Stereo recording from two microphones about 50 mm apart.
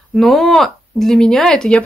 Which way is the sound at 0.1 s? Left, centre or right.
Centre.